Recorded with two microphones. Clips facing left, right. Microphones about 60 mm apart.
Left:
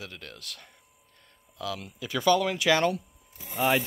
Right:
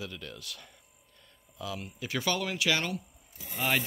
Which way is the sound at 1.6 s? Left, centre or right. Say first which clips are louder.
Left 3 dB; left.